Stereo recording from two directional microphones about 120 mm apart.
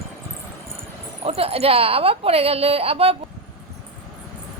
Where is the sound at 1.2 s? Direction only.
55° right (ahead or behind).